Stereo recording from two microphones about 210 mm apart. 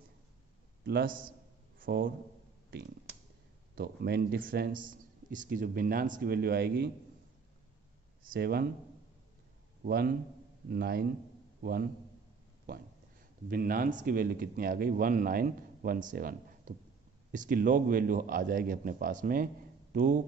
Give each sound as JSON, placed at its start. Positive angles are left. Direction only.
{"t": 0.8, "sound": "a man's voice", "side_deg": -45}
{"t": 3.7, "sound": "a man's voice", "side_deg": -50}
{"t": 8.2, "sound": "speech", "side_deg": -45}
{"t": 9.8, "sound": "a man's voice", "side_deg": -50}
{"t": 13.5, "sound": "a man's voice", "side_deg": -45}